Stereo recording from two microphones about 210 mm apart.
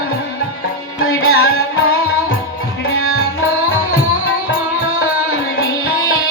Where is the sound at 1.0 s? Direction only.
85° left.